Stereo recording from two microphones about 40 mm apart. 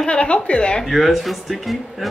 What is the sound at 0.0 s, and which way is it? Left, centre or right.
Speech, left.